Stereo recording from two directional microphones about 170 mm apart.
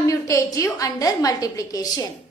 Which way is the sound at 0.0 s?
20° left (ahead or behind).